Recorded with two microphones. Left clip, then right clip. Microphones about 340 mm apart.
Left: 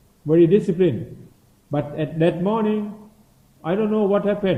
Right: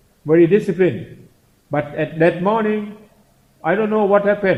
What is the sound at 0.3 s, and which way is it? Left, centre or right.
A man's voice, right.